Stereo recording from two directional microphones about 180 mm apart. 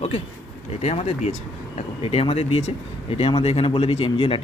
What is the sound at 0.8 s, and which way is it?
Speech, 35° left (ahead or behind).